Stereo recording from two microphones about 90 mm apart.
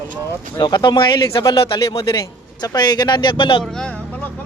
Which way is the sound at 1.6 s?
90° left.